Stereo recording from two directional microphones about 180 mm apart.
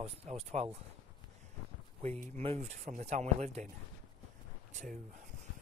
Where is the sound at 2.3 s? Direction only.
35° right (ahead or behind).